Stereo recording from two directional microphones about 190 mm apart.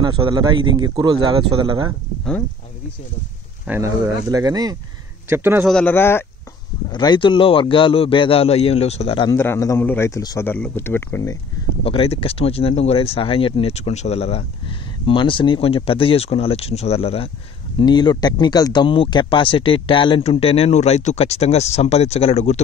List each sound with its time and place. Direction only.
0.0 s speech: 20° right (ahead or behind)
3.6 s speech: 15° right (ahead or behind)
5.7 s speech: 5° left (ahead or behind)
6.9 s a man's voice: 25° left (ahead or behind)
9.3 s speech: 15° left (ahead or behind)
11.8 s speech: 30° left (ahead or behind)